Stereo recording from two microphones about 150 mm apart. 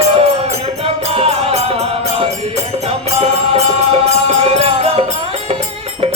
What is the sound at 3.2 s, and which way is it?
Music, 45° right (ahead or behind).